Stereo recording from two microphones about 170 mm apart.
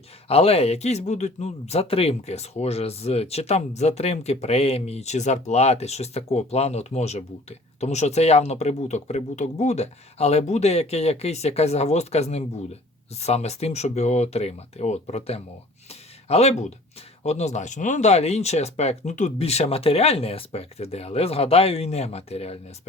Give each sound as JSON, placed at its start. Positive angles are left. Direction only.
{"t": 0.3, "sound": "speech", "side_deg": 35}